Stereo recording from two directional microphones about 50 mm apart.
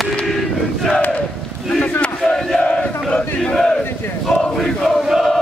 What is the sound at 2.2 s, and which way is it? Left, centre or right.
Battle cry, centre.